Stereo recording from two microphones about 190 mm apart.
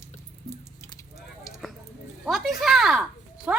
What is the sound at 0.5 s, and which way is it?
Squish, 15° left (ahead or behind).